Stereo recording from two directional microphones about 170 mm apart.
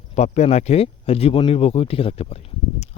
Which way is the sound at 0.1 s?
40° left (ahead or behind).